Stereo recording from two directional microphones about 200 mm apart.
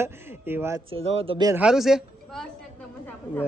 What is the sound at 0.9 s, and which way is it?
Speech, 25° right (ahead or behind).